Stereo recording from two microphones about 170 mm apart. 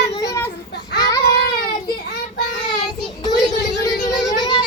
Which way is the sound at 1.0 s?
20° left (ahead or behind).